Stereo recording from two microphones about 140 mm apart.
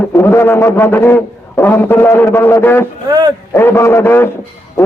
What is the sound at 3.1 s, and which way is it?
Speech, 30° right (ahead or behind).